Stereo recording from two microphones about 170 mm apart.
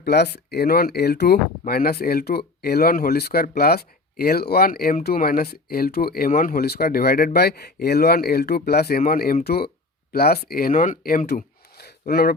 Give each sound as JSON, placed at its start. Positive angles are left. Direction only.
{"t": 0.0, "sound": "speech", "side_deg": 70}